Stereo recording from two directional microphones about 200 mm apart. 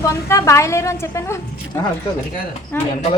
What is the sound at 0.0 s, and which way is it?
A woman's voice, 15° left (ahead or behind).